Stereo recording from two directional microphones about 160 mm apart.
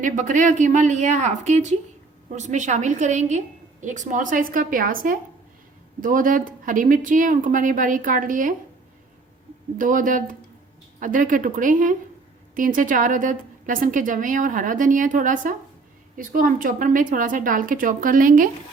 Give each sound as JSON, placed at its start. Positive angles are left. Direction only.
{"t": 0.0, "sound": "a woman's voice", "side_deg": -50}
{"t": 9.7, "sound": "a woman's voice", "side_deg": -55}